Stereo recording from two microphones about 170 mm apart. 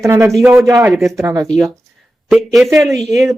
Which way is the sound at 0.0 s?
15° right (ahead or behind).